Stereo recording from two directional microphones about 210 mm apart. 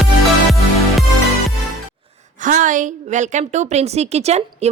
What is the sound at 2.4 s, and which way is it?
A woman's voice, 40° right (ahead or behind).